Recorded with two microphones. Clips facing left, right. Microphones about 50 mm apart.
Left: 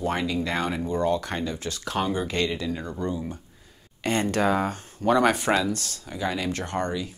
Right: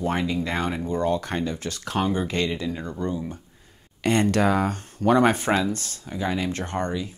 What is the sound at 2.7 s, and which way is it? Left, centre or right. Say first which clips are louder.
Speech: even; centre.